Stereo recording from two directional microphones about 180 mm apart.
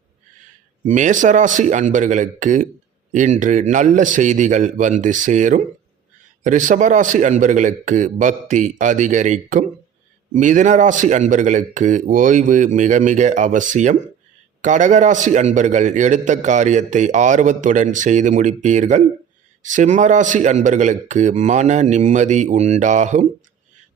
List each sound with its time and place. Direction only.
0.9 s a man's voice: 45° right (ahead or behind)